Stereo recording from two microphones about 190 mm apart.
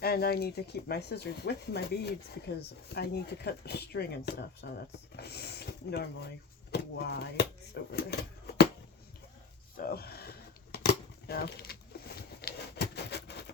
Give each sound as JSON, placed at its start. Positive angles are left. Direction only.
{"t": 0.0, "sound": "speech", "side_deg": 55}
{"t": 9.7, "sound": "scissors", "side_deg": 50}
{"t": 12.4, "sound": "patter", "side_deg": 55}